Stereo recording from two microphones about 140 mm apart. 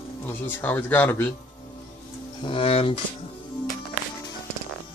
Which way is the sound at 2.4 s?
40° left (ahead or behind).